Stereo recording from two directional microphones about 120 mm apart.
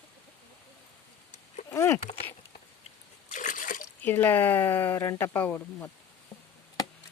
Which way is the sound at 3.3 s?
90° left.